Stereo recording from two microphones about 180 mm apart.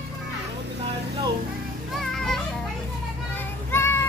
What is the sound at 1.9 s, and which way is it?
Children playing, centre (ahead or behind).